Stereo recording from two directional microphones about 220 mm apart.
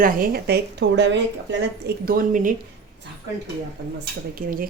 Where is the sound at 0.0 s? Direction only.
40° right (ahead or behind).